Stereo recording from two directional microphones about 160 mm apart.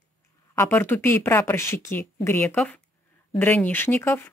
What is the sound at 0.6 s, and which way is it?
Speech, 15° left (ahead or behind).